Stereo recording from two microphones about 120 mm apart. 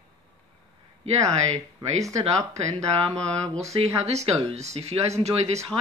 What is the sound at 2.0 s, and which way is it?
Speech, 30° right (ahead or behind).